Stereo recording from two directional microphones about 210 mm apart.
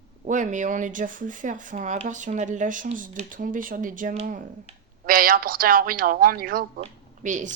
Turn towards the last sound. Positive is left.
turn(degrees=-35)  # may be behind; listen again after turning